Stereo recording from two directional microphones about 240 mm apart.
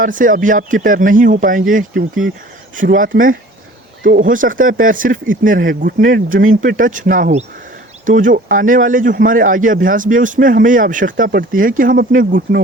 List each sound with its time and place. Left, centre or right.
0.0 s a man's voice: right